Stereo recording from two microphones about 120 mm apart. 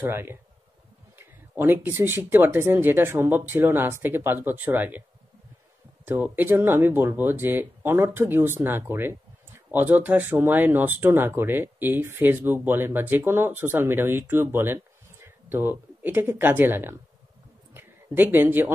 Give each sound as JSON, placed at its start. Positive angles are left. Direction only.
{"t": 0.0, "sound": "speech", "side_deg": -20}
{"t": 6.0, "sound": "speech", "side_deg": -15}
{"t": 17.7, "sound": "a sound", "side_deg": -15}